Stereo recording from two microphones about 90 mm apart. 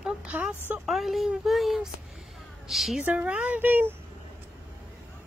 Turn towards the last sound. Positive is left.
turn(degrees=-20)  # may be behind; listen again after turning